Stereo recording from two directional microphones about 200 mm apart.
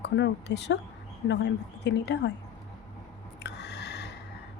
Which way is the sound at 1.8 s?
60° left (ahead or behind).